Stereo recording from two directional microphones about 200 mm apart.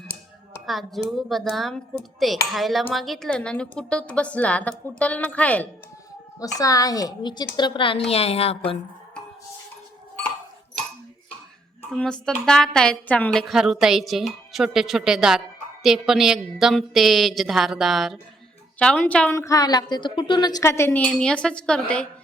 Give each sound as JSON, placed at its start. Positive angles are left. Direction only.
{"t": 0.6, "sound": "speech", "side_deg": 0}
{"t": 6.4, "sound": "a woman's voice", "side_deg": 15}
{"t": 11.9, "sound": "a woman's voice", "side_deg": 5}